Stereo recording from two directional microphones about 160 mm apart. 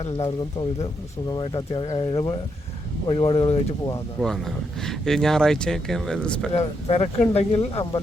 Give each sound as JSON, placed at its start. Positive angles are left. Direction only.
{"t": 1.3, "sound": "speech", "side_deg": 30}
{"t": 4.2, "sound": "speech", "side_deg": 0}
{"t": 6.5, "sound": "speech", "side_deg": 40}